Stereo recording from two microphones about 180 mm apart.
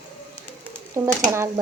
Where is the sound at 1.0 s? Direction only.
15° right (ahead or behind).